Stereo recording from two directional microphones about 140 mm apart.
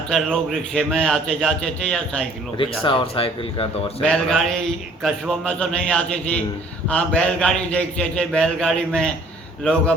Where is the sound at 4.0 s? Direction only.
5° left (ahead or behind).